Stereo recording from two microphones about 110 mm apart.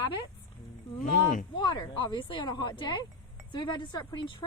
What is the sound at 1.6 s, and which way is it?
A woman's voice, 45° left (ahead or behind).